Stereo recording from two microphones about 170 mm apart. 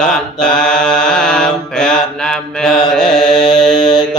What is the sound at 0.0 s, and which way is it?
Mantra, 5° left (ahead or behind).